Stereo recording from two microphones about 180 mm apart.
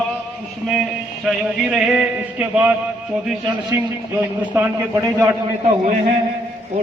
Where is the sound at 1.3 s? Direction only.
Centre (ahead or behind).